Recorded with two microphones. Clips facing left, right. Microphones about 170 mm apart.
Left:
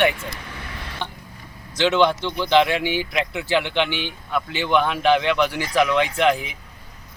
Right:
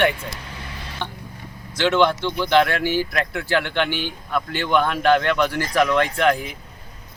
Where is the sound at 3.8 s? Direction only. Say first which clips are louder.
Right 2 dB; 45° right (ahead or behind).